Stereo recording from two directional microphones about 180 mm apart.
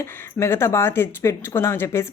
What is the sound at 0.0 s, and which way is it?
Speech, 15° left (ahead or behind).